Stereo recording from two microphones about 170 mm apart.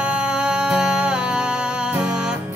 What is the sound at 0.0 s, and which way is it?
Music, 5° right (ahead or behind).